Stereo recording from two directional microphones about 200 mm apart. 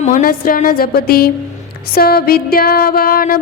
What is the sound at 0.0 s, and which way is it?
A woman's voice, 40° left (ahead or behind).